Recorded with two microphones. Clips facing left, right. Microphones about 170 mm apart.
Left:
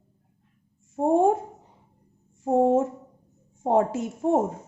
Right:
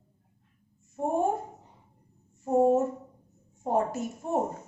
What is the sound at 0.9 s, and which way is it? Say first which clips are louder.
Speech: left 7 dB; 90° left.